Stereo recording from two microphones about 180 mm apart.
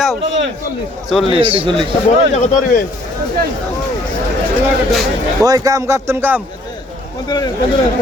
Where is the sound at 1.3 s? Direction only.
30° right (ahead or behind).